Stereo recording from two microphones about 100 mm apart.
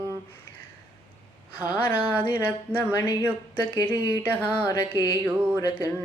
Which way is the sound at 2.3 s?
20° left (ahead or behind).